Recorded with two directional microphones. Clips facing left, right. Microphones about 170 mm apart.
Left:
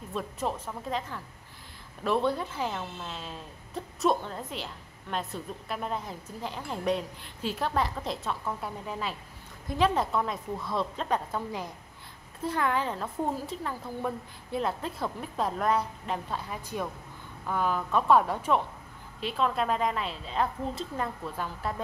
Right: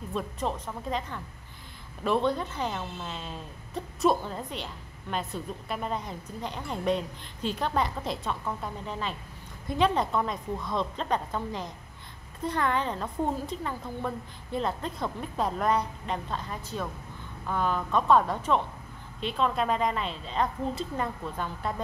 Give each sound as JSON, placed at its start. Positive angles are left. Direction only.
{"t": 0.1, "sound": "a woman's voice", "side_deg": 5}